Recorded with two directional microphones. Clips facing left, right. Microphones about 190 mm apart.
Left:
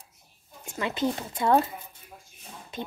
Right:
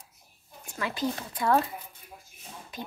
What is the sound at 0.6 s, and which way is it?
A woman's voice, 20° left (ahead or behind).